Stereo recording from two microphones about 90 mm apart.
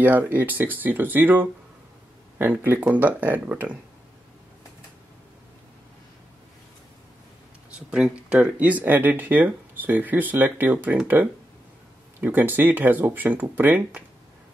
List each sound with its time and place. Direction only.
0.0 s speech: 20° right (ahead or behind)
7.9 s speech: 10° right (ahead or behind)
12.2 s speech: 20° right (ahead or behind)